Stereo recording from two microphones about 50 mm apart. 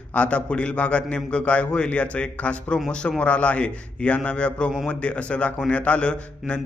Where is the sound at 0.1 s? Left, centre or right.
Left.